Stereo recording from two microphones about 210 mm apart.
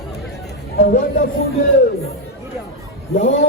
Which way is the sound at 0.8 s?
40° left (ahead or behind).